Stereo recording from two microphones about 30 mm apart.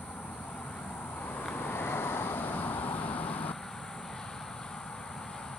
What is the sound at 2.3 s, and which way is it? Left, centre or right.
Vehicle, left.